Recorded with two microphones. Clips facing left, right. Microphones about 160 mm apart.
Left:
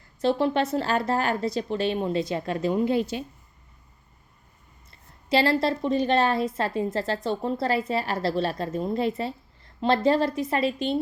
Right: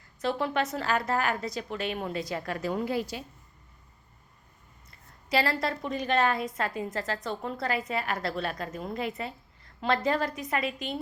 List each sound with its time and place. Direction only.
0.2 s a woman's voice: 30° left (ahead or behind)
4.9 s a woman's voice: 25° left (ahead or behind)